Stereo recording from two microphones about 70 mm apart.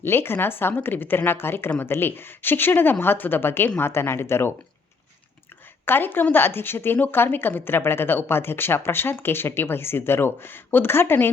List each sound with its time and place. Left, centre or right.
0.0 s speech: left
5.8 s speech: left